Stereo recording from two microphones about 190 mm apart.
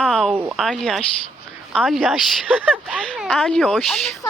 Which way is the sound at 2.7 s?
5° right (ahead or behind).